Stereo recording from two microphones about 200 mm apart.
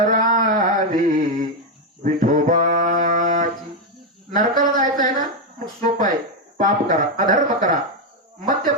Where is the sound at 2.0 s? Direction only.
40° right (ahead or behind).